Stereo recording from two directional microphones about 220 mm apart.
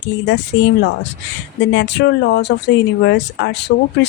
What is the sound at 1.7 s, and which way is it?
Speech, 55° left (ahead or behind).